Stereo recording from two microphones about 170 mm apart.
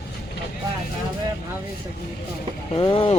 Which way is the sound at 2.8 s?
25° left (ahead or behind).